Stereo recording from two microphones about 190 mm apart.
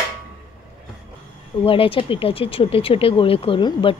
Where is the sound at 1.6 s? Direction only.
30° left (ahead or behind).